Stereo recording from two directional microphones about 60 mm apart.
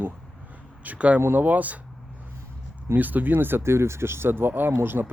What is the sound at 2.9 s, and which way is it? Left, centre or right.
Speech, right.